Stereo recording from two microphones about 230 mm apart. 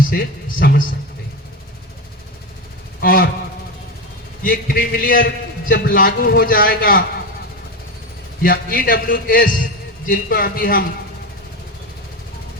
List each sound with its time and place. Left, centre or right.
0.0 s a man's voice: left
3.0 s a sound: left
4.4 s a man's voice: left
8.4 s a man's voice: left